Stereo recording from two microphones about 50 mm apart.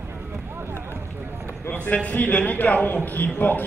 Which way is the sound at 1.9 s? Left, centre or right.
Left.